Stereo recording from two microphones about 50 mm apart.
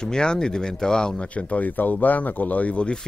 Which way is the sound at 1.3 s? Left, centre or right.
Left.